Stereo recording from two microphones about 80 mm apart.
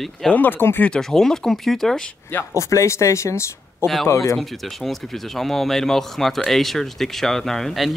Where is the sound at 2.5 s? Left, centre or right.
Left.